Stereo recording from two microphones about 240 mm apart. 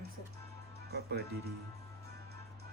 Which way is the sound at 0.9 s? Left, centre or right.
Right.